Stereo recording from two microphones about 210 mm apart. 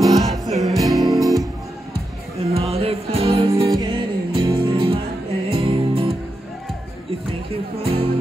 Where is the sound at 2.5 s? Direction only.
30° right (ahead or behind).